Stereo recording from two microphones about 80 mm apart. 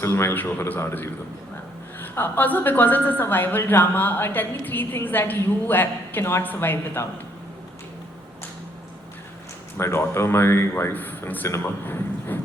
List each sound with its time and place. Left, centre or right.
0.0 s a man's voice: left
9.7 s a man's voice: left